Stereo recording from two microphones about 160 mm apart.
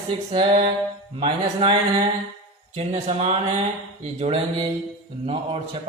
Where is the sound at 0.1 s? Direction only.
35° right (ahead or behind).